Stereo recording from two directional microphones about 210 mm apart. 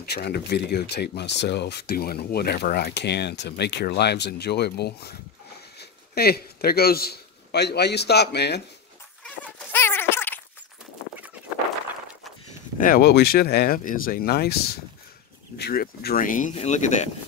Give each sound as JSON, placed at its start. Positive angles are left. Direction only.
{"t": 0.0, "sound": "a man's voice", "side_deg": 50}
{"t": 9.2, "sound": "a sound", "side_deg": 5}
{"t": 12.7, "sound": "speech", "side_deg": 40}